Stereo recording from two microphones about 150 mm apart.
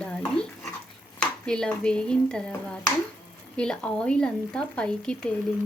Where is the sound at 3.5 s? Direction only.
5° left (ahead or behind).